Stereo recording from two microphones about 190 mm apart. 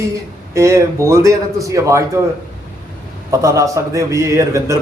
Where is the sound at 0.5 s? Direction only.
15° right (ahead or behind).